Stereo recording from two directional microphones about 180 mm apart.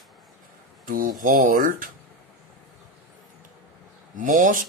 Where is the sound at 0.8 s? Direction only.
50° right (ahead or behind).